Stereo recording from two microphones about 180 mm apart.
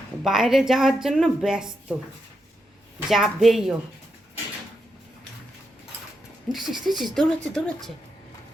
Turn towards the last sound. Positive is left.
turn(degrees=5)  # may be behind; listen again after turning